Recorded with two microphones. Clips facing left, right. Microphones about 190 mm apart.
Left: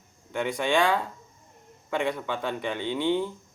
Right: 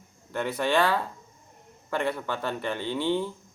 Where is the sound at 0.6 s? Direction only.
10° left (ahead or behind).